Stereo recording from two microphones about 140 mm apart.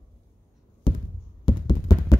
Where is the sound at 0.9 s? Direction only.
35° left (ahead or behind).